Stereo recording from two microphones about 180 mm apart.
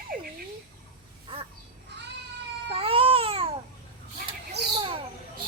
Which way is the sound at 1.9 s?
70° right (ahead or behind).